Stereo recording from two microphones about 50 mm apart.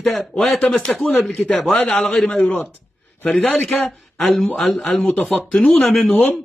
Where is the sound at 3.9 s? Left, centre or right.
Centre.